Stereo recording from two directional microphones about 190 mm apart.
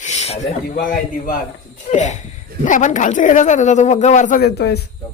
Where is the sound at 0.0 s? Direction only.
35° left (ahead or behind).